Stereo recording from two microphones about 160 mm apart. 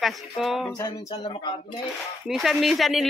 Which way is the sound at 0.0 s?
Centre (ahead or behind).